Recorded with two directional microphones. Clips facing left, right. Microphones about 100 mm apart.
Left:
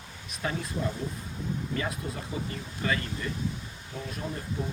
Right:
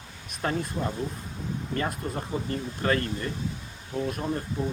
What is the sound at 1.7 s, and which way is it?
Speech, 45° right (ahead or behind).